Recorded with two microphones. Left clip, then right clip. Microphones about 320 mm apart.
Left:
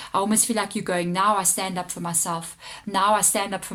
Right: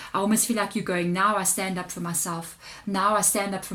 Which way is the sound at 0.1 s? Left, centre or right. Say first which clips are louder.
Left 2 dB; centre.